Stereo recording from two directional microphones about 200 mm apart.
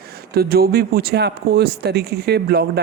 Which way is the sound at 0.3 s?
50° right (ahead or behind).